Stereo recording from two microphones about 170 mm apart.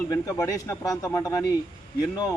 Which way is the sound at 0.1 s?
20° left (ahead or behind).